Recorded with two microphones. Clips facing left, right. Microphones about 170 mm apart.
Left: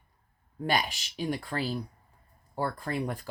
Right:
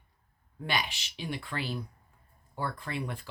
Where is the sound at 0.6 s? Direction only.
40° left (ahead or behind).